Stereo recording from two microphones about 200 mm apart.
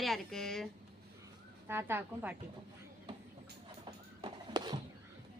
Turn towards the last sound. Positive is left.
turn(degrees=-20)  # may be behind; listen again after turning